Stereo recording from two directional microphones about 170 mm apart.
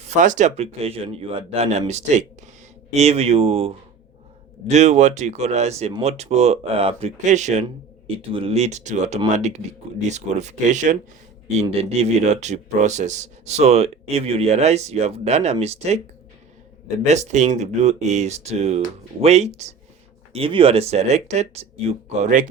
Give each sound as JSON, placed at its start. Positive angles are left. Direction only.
{"t": 0.0, "sound": "a man's voice", "side_deg": -45}
{"t": 8.0, "sound": "a man's voice", "side_deg": -35}
{"t": 17.0, "sound": "a man's voice", "side_deg": -40}